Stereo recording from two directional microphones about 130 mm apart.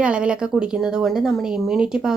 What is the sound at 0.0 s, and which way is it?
Speech, 10° right (ahead or behind).